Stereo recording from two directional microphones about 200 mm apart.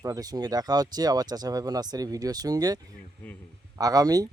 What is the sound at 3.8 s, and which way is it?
Speech, 20° right (ahead or behind).